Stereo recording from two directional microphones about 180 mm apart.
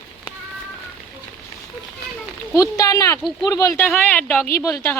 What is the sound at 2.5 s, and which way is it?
Speech, 20° left (ahead or behind).